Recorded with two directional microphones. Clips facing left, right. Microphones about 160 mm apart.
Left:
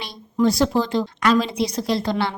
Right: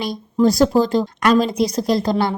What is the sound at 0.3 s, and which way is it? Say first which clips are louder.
Speech: right 4 dB; 40° right (ahead or behind).